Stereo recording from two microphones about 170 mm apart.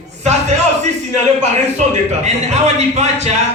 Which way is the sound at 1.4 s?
40° right (ahead or behind).